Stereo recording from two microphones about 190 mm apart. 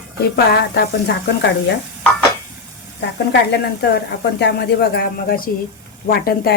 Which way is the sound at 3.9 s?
65° left (ahead or behind).